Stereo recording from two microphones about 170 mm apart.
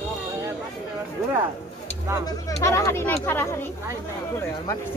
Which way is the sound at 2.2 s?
15° left (ahead or behind).